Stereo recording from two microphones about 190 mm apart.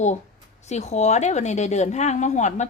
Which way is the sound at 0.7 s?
35° left (ahead or behind).